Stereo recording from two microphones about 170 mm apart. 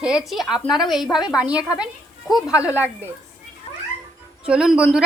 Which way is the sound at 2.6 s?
10° right (ahead or behind).